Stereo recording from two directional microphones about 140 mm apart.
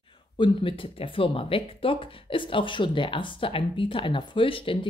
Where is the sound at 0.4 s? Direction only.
40° left (ahead or behind).